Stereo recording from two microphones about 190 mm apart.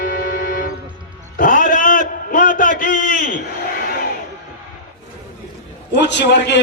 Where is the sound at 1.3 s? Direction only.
45° left (ahead or behind).